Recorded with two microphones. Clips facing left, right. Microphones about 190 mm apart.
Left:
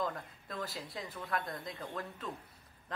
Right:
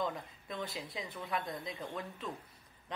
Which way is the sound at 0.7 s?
25° right (ahead or behind).